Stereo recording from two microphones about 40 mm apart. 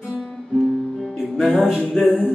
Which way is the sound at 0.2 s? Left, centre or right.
Centre.